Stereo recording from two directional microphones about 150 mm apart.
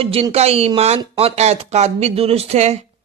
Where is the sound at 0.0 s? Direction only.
40° right (ahead or behind).